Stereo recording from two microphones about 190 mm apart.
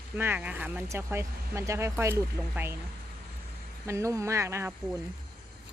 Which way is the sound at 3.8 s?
15° right (ahead or behind).